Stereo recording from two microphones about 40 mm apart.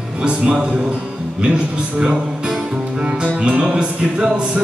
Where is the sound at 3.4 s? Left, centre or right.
Right.